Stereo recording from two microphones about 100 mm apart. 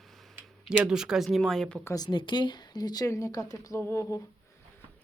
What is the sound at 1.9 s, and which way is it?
Speech, 45° left (ahead or behind).